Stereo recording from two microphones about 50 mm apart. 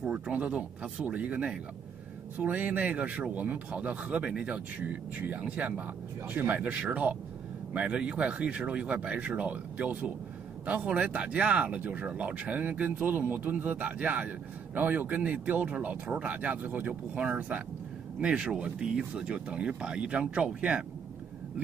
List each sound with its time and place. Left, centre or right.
0.1 s speech: right
18.2 s speech: centre